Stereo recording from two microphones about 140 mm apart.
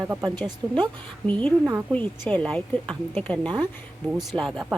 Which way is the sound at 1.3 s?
10° left (ahead or behind).